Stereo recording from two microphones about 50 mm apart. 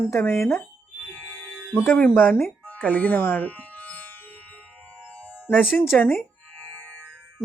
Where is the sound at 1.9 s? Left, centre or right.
Left.